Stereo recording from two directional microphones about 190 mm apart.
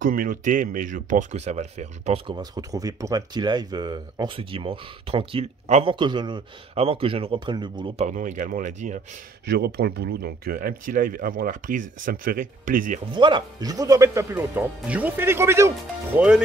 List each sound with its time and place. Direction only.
0.0 s speech: 50° right (ahead or behind); by 8.1 s 25° right (ahead or behind)
8.1 s speech: 40° right (ahead or behind)
9.5 s speech: 55° right (ahead or behind)
13.1 s speech: 25° right (ahead or behind); by 16.4 s 5° right (ahead or behind)